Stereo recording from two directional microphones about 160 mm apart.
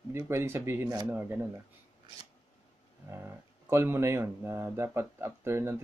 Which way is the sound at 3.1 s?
15° right (ahead or behind).